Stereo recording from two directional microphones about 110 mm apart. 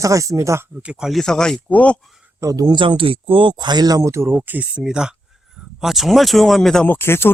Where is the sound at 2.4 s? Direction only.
30° right (ahead or behind).